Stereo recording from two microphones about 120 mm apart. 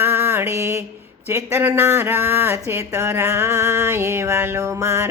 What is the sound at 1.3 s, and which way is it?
Speech, 20° right (ahead or behind).